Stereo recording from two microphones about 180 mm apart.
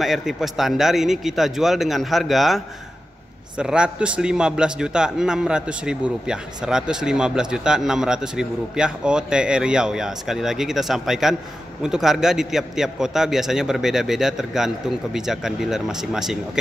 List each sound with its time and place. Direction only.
0.0 s a man's voice: centre (ahead or behind)